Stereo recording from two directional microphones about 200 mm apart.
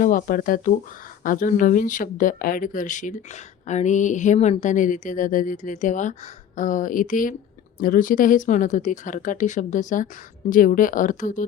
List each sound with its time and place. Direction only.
0.0 s speech: 45° left (ahead or behind)